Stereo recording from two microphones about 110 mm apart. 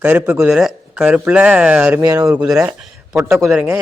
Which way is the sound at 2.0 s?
30° right (ahead or behind).